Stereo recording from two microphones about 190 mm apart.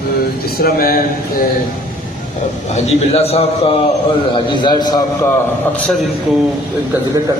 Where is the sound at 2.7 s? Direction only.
35° left (ahead or behind).